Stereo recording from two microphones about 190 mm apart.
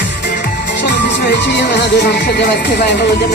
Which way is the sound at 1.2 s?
60° left (ahead or behind).